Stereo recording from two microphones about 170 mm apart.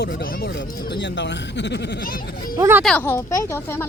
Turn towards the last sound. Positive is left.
turn(degrees=15)  # may be behind; listen again after turning